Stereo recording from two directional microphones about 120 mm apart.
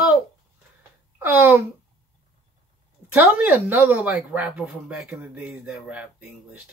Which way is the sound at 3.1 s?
15° right (ahead or behind).